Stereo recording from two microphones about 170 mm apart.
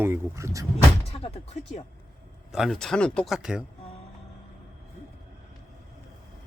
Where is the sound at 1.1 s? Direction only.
35° left (ahead or behind).